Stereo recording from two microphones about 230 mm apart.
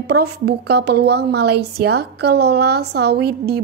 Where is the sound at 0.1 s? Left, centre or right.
Right.